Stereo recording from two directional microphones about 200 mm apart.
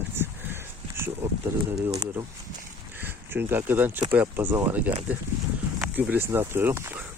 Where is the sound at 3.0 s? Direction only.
10° right (ahead or behind).